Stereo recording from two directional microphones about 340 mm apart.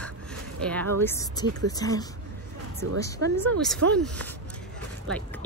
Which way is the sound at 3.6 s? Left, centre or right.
Centre.